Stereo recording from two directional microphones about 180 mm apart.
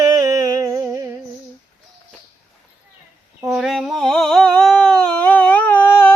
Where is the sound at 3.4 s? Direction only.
Centre (ahead or behind).